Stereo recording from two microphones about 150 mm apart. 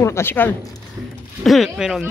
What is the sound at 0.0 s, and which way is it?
Speech, 15° left (ahead or behind).